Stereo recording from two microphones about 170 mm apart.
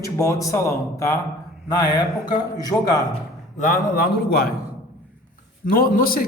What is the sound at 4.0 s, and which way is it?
Speech, 65° left (ahead or behind).